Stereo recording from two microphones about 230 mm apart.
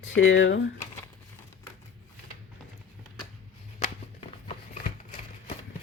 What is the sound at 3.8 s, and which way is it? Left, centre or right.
Shuffling cards, left.